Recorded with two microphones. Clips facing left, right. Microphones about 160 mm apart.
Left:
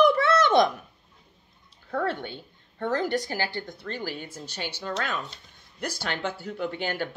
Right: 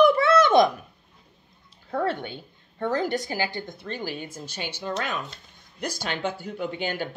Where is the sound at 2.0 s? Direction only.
15° right (ahead or behind).